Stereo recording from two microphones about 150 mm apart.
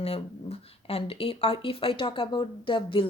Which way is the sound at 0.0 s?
40° left (ahead or behind).